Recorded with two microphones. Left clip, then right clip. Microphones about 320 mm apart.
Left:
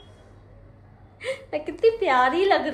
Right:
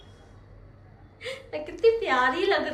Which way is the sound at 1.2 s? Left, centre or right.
Centre.